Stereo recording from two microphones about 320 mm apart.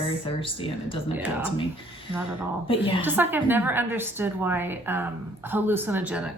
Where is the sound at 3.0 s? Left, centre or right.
Centre.